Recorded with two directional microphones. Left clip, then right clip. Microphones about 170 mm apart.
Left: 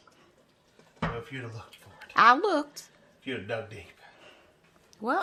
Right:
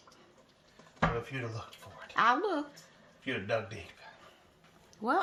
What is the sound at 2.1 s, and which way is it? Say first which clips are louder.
Speech: left 7 dB; 35° left (ahead or behind).